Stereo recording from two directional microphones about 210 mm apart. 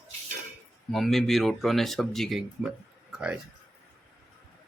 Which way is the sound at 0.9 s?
Centre (ahead or behind).